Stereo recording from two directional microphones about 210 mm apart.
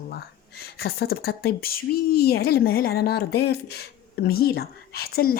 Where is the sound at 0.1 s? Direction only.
50° left (ahead or behind).